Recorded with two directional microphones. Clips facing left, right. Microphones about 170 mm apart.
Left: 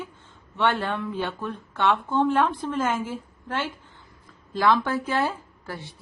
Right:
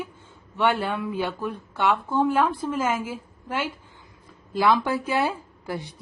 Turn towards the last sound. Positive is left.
turn(degrees=-15)  # may be behind; listen again after turning